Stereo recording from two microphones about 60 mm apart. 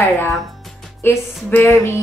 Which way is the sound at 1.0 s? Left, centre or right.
Left.